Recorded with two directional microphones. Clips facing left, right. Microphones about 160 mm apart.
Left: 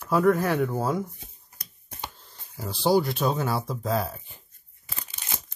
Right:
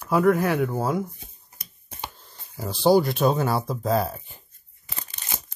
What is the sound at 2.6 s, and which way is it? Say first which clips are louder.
Speech: right 4 dB; 55° right (ahead or behind).